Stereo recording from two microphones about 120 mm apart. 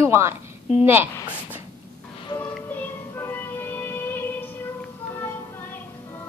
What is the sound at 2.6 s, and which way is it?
Music, 15° left (ahead or behind).